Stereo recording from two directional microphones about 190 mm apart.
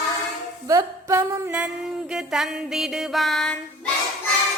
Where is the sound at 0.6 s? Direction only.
15° right (ahead or behind).